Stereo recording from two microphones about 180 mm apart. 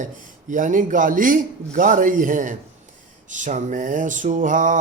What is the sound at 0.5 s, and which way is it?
Mantra, 45° right (ahead or behind).